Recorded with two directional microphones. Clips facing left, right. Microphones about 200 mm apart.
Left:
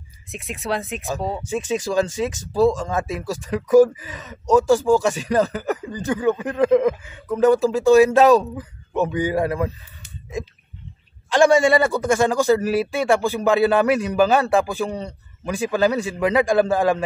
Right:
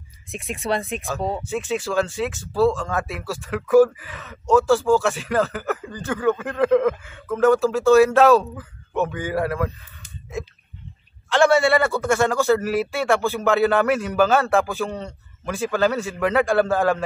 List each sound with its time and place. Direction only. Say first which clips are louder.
0.3 s speech: right 1 dB; centre (ahead or behind)
1.7 s speech: left 2 dB; 15° left (ahead or behind)
11.2 s speech: left 2 dB; 15° left (ahead or behind)